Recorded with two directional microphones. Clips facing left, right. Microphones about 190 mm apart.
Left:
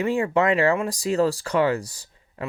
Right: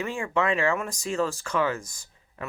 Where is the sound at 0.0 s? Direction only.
35° left (ahead or behind).